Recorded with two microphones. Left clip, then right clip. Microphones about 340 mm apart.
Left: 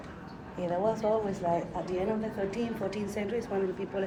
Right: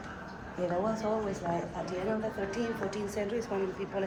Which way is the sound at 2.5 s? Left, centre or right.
Left.